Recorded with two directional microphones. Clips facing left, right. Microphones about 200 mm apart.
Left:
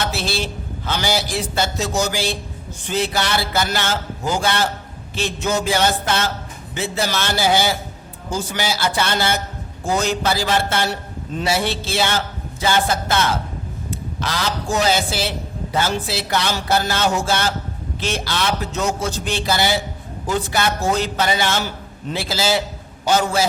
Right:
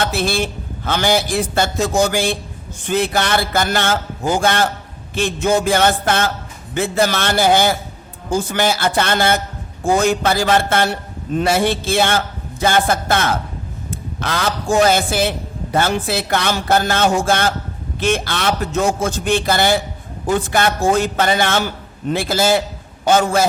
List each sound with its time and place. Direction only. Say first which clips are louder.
0.0 s a man's voice: right 4 dB; 55° right (ahead or behind)